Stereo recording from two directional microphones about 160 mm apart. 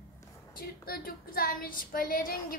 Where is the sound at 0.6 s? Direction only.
65° left (ahead or behind).